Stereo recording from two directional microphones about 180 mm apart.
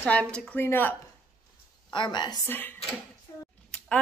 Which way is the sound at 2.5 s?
10° left (ahead or behind).